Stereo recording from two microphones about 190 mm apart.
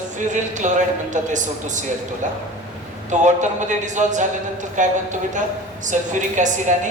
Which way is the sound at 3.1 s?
40° right (ahead or behind).